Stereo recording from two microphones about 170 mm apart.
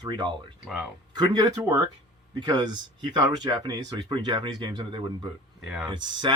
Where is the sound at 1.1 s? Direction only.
25° right (ahead or behind).